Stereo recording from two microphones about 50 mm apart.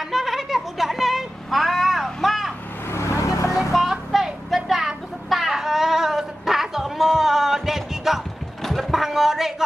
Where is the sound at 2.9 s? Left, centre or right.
Left.